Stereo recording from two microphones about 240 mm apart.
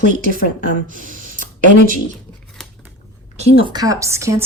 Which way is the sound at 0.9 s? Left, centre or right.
Right.